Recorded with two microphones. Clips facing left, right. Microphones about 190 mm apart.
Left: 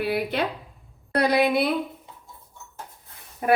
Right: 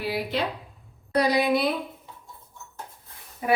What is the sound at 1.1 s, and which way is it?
Speech, 60° left (ahead or behind).